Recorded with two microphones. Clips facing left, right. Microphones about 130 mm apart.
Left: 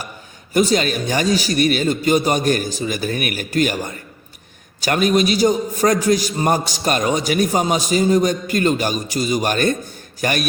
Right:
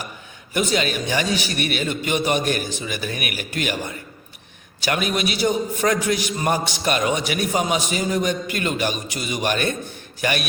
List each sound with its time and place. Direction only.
0.5 s a man's voice: 40° left (ahead or behind)